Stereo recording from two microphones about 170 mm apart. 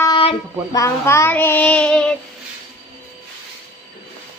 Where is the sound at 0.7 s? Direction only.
15° left (ahead or behind).